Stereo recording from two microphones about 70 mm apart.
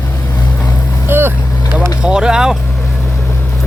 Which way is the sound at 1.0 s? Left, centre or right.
Right.